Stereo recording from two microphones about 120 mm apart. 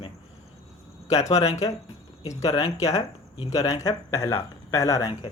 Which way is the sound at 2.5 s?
50° left (ahead or behind).